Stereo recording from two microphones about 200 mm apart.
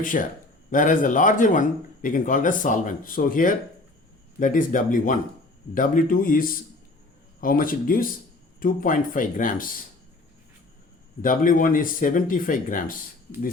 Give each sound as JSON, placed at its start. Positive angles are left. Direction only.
{"t": 0.0, "sound": "speech", "side_deg": 40}
{"t": 11.2, "sound": "speech", "side_deg": 45}